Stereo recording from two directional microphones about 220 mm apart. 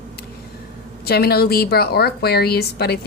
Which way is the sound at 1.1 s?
45° left (ahead or behind).